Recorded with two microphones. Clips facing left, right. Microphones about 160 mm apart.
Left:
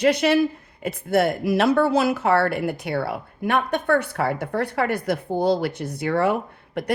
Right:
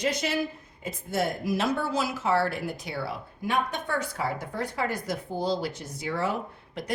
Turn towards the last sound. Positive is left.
turn(degrees=60)  # may be behind; listen again after turning